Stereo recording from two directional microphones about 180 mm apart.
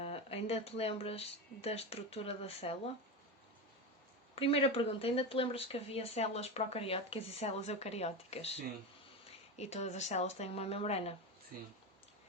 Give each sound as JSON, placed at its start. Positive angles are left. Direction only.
{"t": 0.0, "sound": "speech", "side_deg": 35}
{"t": 4.4, "sound": "speech", "side_deg": 30}